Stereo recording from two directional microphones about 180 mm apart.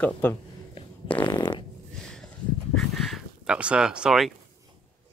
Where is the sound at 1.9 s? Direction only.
5° left (ahead or behind).